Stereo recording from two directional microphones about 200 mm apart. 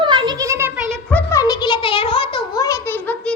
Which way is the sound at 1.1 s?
10° left (ahead or behind).